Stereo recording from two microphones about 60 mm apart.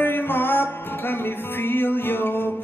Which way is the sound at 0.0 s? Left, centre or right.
Left.